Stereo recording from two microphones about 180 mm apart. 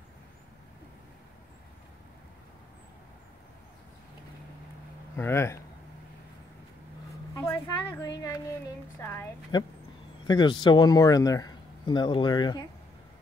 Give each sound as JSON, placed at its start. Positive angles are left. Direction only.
{"t": 5.1, "sound": "speech", "side_deg": 10}
{"t": 7.3, "sound": "child singing", "side_deg": 15}
{"t": 10.2, "sound": "speech", "side_deg": 25}